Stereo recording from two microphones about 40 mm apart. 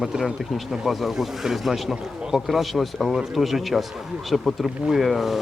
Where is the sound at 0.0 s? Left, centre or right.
Centre.